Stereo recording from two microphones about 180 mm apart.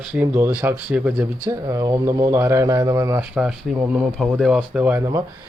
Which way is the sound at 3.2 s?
5° right (ahead or behind).